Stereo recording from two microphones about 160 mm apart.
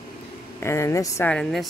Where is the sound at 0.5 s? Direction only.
15° left (ahead or behind).